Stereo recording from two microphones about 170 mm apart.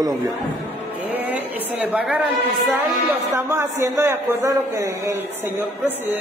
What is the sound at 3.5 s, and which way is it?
A man's voice, 15° right (ahead or behind).